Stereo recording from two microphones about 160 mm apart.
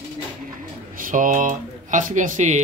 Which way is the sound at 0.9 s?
55° right (ahead or behind).